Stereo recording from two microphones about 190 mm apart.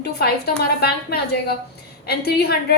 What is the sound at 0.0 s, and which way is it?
A woman's voice, 55° left (ahead or behind).